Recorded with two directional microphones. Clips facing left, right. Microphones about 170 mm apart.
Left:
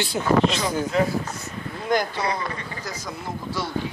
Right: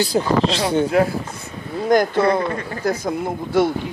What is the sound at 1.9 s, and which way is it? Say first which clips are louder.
Speech: right 8 dB; 50° right (ahead or behind).